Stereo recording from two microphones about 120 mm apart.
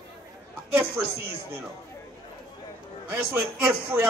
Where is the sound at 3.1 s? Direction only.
20° right (ahead or behind).